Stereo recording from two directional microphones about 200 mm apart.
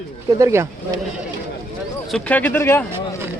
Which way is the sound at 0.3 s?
15° right (ahead or behind).